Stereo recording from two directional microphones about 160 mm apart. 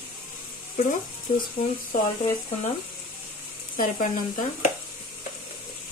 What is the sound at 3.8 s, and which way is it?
Speech, 60° left (ahead or behind).